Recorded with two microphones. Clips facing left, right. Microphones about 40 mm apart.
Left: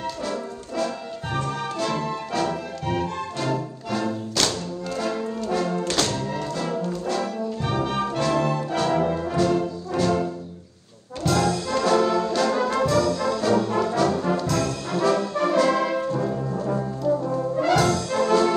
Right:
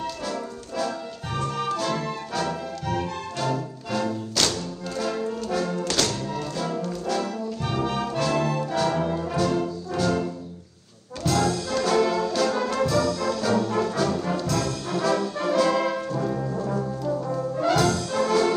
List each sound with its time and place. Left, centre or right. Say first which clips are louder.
0.3 s music: left 2 dB; left
9.1 s brass instrument: left 2 dB; centre
9.4 s brass instrument: left 3 dB; left
11.2 s brass instrument: left 1 dB; left
12.4 s music: left 2 dB; left
17.6 s brass instrument: left 1 dB; left